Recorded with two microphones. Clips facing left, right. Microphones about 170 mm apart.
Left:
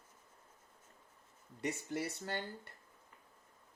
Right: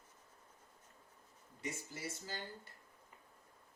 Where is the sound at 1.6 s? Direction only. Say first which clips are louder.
Left 7 dB; 65° left (ahead or behind).